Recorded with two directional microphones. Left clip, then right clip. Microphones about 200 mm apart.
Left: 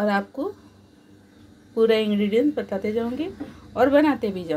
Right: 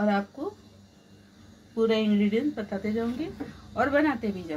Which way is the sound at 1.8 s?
50° left (ahead or behind).